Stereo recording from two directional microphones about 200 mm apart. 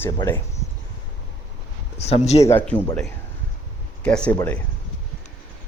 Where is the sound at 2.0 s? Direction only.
30° left (ahead or behind).